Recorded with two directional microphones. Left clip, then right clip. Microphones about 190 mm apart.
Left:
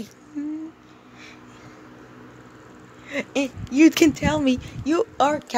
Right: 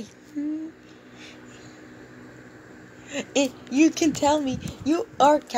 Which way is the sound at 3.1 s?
25° left (ahead or behind).